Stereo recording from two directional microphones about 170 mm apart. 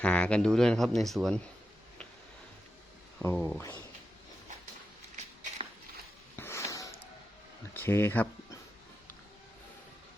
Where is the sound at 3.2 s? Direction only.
10° left (ahead or behind).